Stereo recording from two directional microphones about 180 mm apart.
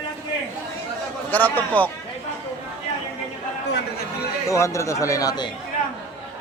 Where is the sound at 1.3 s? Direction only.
10° left (ahead or behind).